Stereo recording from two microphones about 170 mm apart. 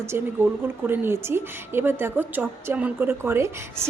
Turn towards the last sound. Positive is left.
turn(degrees=-15)  # may be behind; listen again after turning